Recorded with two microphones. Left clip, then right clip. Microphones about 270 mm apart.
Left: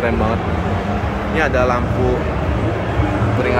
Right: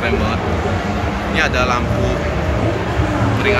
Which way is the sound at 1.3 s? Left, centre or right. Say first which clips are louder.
Even; centre.